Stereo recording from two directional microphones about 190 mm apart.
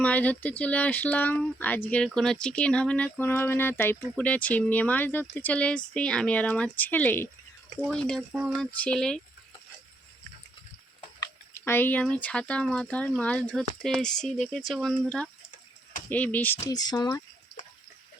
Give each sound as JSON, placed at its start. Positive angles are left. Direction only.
{"t": 0.0, "sound": "speech", "side_deg": 10}
{"t": 8.3, "sound": "speech", "side_deg": -5}
{"t": 8.8, "sound": "speech", "side_deg": 5}
{"t": 11.2, "sound": "speech", "side_deg": 15}